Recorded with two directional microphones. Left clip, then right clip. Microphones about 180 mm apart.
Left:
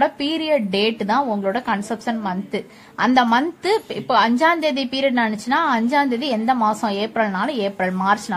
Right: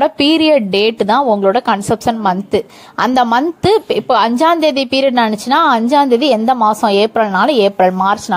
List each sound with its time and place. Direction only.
0.0 s a woman's voice: 40° right (ahead or behind)